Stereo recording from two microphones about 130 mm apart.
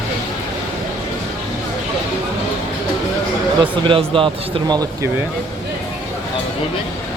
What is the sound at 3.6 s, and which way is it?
Speech, 40° right (ahead or behind).